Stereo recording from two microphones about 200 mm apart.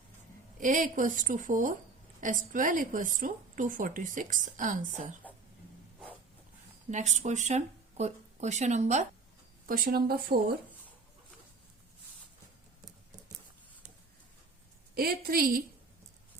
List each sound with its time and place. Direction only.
0.6 s a woman's voice: 40° right (ahead or behind)
6.9 s a woman's voice: 35° right (ahead or behind)
14.9 s speech: 50° right (ahead or behind)